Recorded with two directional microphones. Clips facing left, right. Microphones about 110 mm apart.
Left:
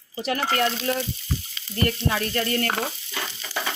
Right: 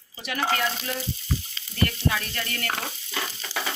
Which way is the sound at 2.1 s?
40° left (ahead or behind).